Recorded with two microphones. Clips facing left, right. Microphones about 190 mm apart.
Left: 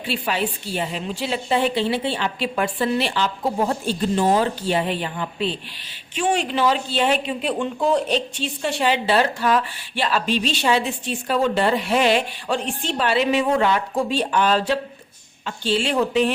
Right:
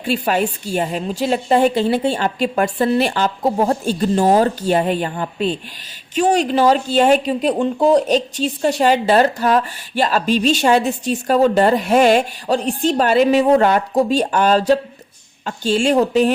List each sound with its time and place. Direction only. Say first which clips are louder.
0.0 s speech: right 6 dB; 45° right (ahead or behind)